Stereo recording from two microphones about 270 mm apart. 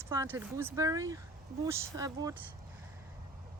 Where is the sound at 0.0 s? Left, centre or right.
Centre.